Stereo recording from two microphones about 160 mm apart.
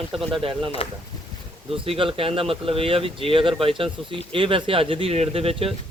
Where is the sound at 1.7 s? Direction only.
35° right (ahead or behind).